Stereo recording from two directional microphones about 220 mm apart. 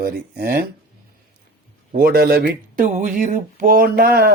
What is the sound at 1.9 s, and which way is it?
Speech, 45° right (ahead or behind).